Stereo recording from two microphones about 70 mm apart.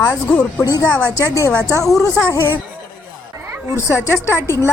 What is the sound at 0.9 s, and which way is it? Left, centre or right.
Speech, centre.